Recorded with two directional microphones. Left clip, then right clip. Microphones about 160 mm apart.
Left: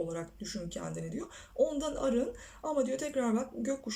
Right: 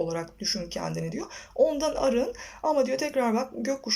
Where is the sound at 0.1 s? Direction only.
30° left (ahead or behind).